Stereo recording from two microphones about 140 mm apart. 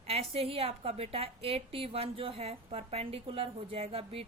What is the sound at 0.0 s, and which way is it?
A woman's voice, 45° right (ahead or behind).